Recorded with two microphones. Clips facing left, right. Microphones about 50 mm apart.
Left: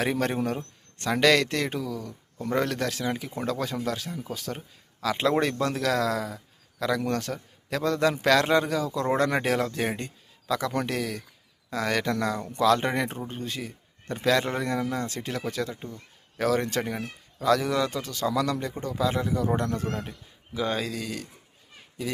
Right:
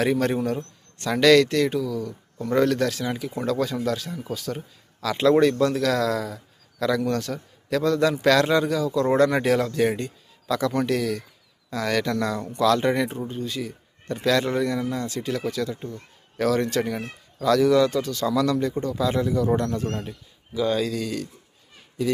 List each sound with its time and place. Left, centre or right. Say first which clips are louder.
0.0 s speech: right 4 dB; centre
0.3 s speech: right 3 dB; left
1.1 s a man's voice: right 5 dB; centre
7.0 s a man's voice: right 3 dB; left
10.7 s speech: right 5 dB; left
10.9 s a man's voice: right 5 dB; centre; by 15.4 s left
15.7 s a man's voice: right 5 dB; centre
20.5 s speech: right 5 dB; left
20.8 s a man's voice: right 6 dB; centre